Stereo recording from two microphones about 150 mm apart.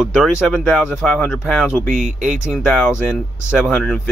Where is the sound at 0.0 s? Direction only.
5° right (ahead or behind).